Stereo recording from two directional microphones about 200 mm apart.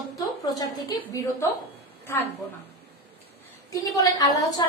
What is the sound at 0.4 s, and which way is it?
A woman's voice, 20° left (ahead or behind).